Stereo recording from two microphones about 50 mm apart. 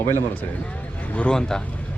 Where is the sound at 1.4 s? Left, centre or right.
Centre.